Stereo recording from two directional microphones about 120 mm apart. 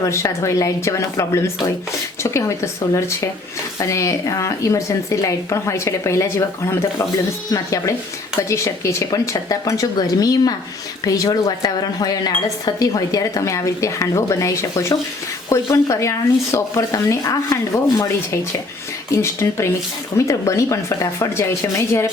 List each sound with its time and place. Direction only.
0.0 s speech: 25° left (ahead or behind)